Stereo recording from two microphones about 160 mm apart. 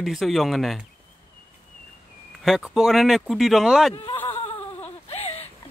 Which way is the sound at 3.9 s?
30° left (ahead or behind).